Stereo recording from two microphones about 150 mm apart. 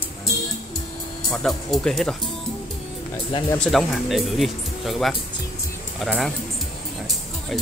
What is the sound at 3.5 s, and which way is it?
Speech, 5° left (ahead or behind).